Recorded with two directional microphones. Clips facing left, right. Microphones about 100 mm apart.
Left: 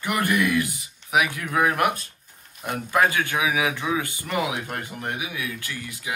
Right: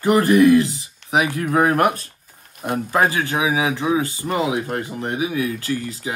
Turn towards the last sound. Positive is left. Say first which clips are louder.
# right 7 dB
turn(degrees=-35)  # may be behind; listen again after turning